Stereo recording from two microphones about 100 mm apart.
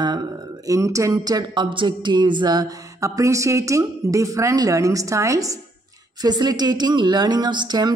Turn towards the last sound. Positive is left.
turn(degrees=-45)  # may be behind; listen again after turning